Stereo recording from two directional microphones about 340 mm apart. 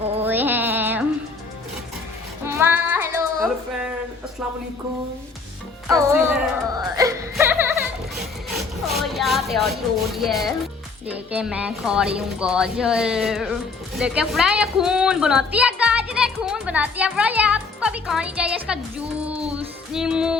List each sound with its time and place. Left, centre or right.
0.3 s music: centre
2.4 s child singing: centre
5.9 s music: centre
11.0 s a woman's voice: centre
19.5 s music: centre